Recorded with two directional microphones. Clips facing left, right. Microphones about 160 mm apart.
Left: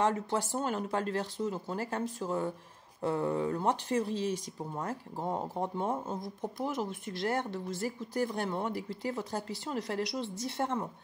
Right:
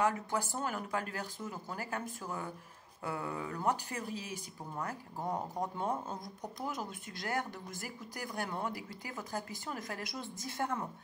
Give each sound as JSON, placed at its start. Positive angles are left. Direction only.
{"t": 0.0, "sound": "speech", "side_deg": 30}